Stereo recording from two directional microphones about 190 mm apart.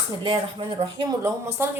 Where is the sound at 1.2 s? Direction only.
15° right (ahead or behind).